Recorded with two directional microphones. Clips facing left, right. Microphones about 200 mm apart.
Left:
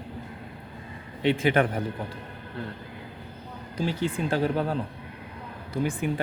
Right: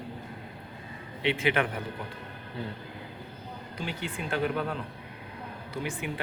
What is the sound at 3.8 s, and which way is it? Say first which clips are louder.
Speech: left 8 dB; 35° left (ahead or behind).